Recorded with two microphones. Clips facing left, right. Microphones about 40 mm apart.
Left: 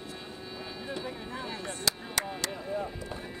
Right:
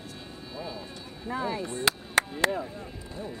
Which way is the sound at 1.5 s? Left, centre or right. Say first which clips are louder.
Right 5 dB; right.